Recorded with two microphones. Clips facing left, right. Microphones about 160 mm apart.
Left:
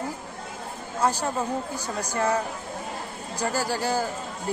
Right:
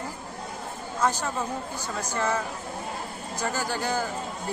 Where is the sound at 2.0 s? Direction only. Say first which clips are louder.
Left 2 dB; 35° left (ahead or behind).